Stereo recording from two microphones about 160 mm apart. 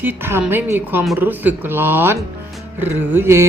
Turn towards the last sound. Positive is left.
turn(degrees=-15)  # may be behind; listen again after turning